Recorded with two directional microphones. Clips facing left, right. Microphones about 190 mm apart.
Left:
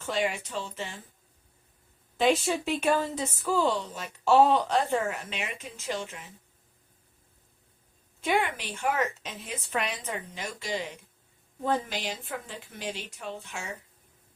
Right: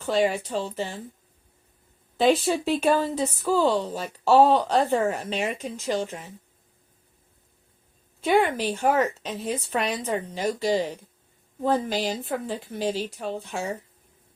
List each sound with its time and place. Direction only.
0.0 s speech: 35° right (ahead or behind)
2.1 s speech: 35° right (ahead or behind)
8.2 s speech: 35° right (ahead or behind)